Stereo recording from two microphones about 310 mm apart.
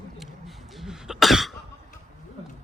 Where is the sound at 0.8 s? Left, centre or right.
Centre.